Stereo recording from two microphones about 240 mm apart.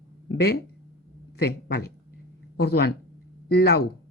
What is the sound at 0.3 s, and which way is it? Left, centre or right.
Speech, left.